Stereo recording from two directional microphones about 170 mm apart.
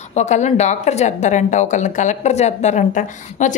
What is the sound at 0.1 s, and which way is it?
A woman's voice, 45° left (ahead or behind).